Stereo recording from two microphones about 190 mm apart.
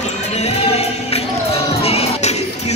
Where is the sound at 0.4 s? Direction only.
35° left (ahead or behind).